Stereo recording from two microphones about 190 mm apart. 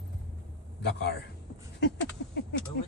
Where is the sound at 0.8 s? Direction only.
60° left (ahead or behind).